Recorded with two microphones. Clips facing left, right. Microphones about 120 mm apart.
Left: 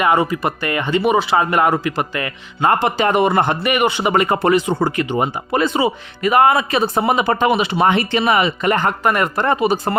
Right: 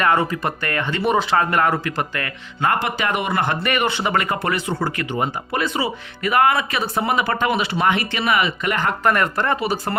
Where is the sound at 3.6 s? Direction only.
15° left (ahead or behind); by 8.9 s 30° left (ahead or behind).